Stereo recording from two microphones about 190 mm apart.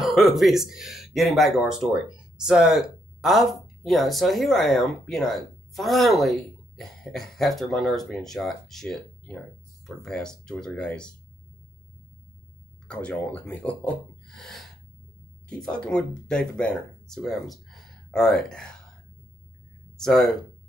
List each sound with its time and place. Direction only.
0.0 s speech: centre (ahead or behind)
12.8 s speech: 5° left (ahead or behind)
20.0 s speech: centre (ahead or behind)